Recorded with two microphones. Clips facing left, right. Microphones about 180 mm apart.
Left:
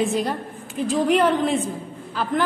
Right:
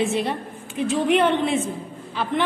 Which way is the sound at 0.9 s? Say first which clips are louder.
Left 1 dB; centre (ahead or behind).